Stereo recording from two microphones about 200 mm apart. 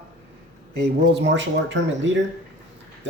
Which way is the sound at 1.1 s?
60° right (ahead or behind).